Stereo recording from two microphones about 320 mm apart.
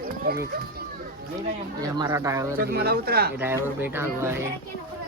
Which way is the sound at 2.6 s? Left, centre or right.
Right.